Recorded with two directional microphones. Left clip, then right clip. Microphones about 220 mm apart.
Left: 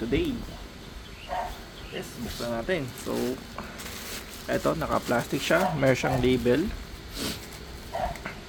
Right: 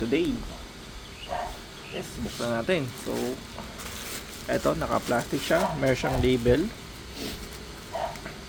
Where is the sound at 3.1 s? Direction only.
10° left (ahead or behind).